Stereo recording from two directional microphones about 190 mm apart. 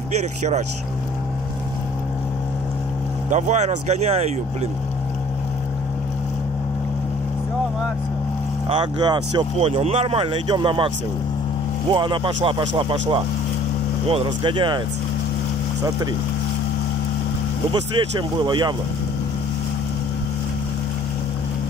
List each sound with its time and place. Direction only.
3.3 s speech: 40° right (ahead or behind)
8.6 s speech: 25° right (ahead or behind)
11.9 s speech: 25° right (ahead or behind)
14.0 s speech: 25° right (ahead or behind)
17.9 s speech: 25° right (ahead or behind)